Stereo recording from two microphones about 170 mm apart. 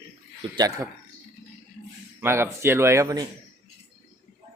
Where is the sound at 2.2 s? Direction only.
15° right (ahead or behind).